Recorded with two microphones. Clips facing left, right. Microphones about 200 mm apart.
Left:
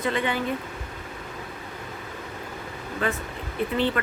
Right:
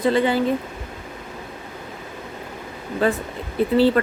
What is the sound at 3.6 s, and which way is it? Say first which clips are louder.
Speech: right 7 dB; 35° right (ahead or behind).